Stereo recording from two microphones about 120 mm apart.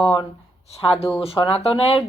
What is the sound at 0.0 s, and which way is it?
Speech, 40° left (ahead or behind).